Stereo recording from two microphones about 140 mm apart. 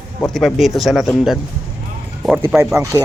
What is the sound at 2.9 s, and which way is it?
Speech, 25° right (ahead or behind).